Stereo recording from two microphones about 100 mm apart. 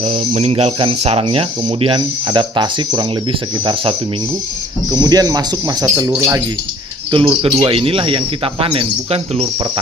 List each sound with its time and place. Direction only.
0.0 s speech: 85° right; by 3.9 s 55° right (ahead or behind)
4.9 s speech: 40° right (ahead or behind)
7.1 s speech: 60° right (ahead or behind); by 9.5 s 85° right